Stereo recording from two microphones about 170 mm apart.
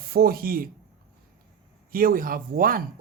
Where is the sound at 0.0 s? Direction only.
65° right (ahead or behind).